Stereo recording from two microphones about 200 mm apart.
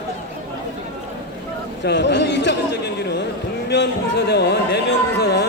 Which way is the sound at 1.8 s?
60° left (ahead or behind).